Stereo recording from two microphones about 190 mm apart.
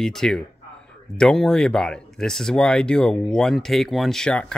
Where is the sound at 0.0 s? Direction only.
Centre (ahead or behind).